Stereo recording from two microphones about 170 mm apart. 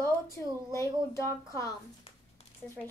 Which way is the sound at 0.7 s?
15° left (ahead or behind).